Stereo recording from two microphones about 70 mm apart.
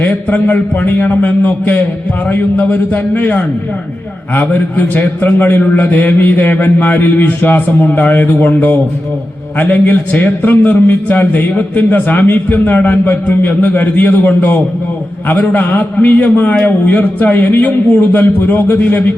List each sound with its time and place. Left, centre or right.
0.0 s a man's voice: left